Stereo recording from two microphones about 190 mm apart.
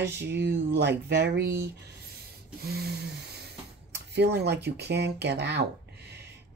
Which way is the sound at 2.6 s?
55° right (ahead or behind).